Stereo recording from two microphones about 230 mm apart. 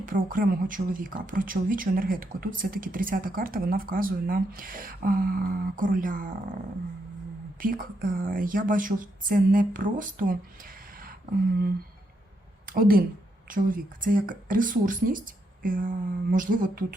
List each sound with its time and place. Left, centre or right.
0.0 s speech: right
7.6 s a woman's voice: right